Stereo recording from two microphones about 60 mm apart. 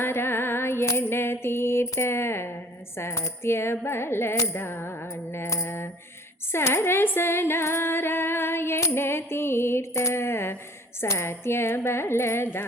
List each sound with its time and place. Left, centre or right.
0.0 s music: left
5.3 s music: left